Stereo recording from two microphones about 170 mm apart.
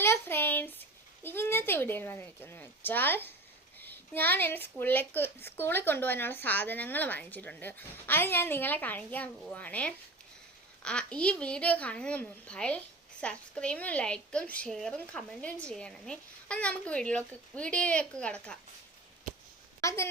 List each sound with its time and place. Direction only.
0.0 s a woman's voice: 15° left (ahead or behind)
19.8 s speech: 15° left (ahead or behind)